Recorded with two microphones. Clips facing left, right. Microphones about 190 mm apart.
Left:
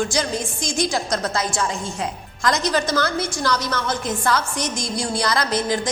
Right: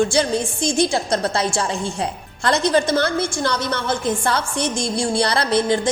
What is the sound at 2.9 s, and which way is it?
A woman's voice, 25° right (ahead or behind).